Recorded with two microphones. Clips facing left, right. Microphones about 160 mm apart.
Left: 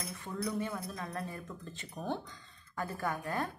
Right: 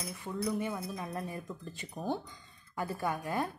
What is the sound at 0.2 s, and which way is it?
Speech, 15° right (ahead or behind).